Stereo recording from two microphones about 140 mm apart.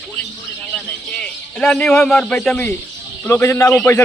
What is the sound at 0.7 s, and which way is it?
Bird, 10° left (ahead or behind).